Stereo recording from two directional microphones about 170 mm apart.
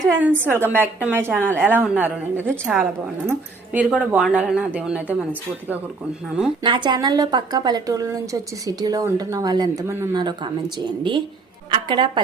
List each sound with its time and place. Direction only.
0.2 s a woman's voice: 10° right (ahead or behind)
6.6 s a woman's voice: 25° right (ahead or behind)
10.2 s a woman's voice: 25° right (ahead or behind)